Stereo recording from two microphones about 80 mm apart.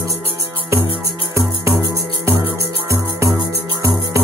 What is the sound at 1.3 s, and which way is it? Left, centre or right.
Music, right.